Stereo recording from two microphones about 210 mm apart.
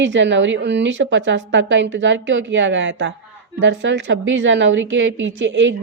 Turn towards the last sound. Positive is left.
turn(degrees=-60)  # may be behind; listen again after turning